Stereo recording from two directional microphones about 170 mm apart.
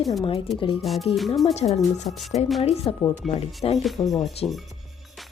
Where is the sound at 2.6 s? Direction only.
40° left (ahead or behind).